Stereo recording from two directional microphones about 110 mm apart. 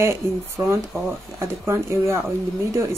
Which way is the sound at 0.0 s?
25° right (ahead or behind).